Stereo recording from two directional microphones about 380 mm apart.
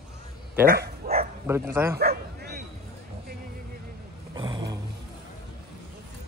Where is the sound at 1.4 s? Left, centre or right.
Centre.